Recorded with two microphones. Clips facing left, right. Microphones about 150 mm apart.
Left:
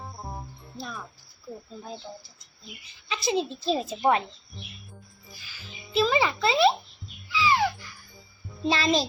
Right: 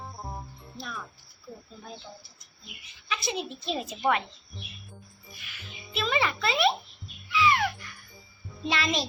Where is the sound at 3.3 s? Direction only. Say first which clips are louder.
Left 8 dB; 30° left (ahead or behind).